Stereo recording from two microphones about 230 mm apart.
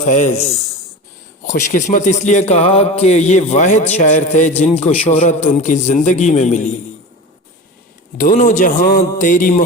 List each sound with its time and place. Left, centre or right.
0.0 s a man's voice: left
8.2 s a man's voice: left